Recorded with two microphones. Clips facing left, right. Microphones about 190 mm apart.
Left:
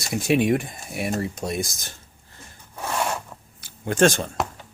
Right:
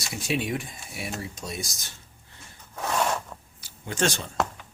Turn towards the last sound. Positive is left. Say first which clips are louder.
# left 8 dB
turn(degrees=50)  # may be behind; listen again after turning